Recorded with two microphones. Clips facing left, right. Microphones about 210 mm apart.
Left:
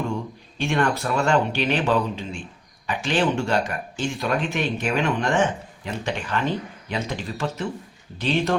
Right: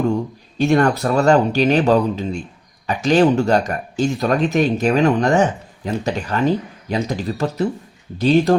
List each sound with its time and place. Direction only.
0.6 s speech: 40° right (ahead or behind)